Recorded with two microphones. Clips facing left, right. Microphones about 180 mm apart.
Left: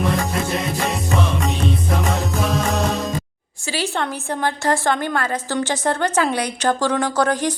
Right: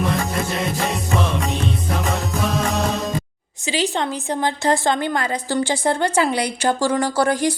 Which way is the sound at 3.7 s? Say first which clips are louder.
Right 2 dB; 15° right (ahead or behind).